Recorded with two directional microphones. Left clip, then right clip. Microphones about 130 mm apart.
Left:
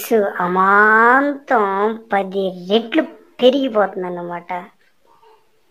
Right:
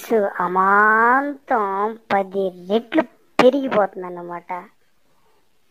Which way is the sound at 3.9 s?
35° right (ahead or behind).